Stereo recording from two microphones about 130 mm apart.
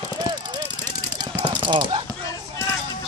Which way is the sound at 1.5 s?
35° right (ahead or behind).